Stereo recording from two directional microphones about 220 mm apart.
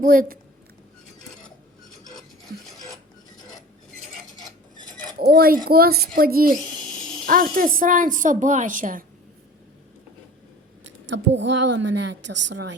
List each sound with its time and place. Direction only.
0.0 s a woman's voice: 40° right (ahead or behind)
3.3 s filing: 20° left (ahead or behind)
5.2 s a woman's voice: 45° right (ahead or behind)
11.0 s a woman's voice: 55° right (ahead or behind)